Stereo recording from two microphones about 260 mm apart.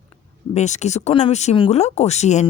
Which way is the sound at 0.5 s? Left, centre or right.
Left.